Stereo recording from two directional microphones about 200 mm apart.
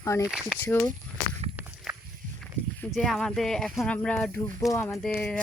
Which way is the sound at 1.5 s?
10° right (ahead or behind).